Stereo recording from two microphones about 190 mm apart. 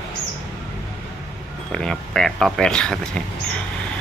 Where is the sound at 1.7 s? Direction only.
5° left (ahead or behind).